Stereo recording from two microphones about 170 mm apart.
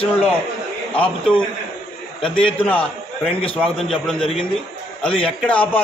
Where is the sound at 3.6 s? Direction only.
5° left (ahead or behind).